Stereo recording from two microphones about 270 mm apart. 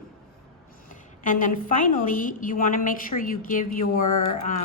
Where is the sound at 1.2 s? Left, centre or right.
Left.